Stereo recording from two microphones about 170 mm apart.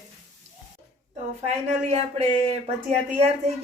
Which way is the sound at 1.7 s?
40° right (ahead or behind).